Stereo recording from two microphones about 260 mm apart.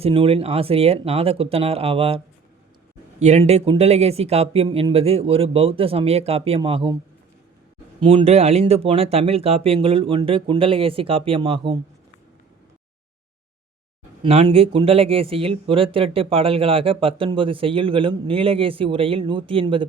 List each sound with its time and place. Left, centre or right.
0.0 s speech: right
8.0 s speech: right
14.2 s speech: right